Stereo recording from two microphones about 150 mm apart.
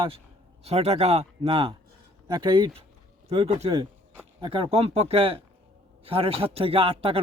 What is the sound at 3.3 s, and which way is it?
Speech, 45° right (ahead or behind).